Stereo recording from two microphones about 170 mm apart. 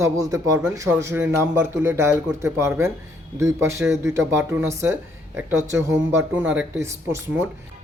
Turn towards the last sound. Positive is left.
turn(degrees=-15)  # may be behind; listen again after turning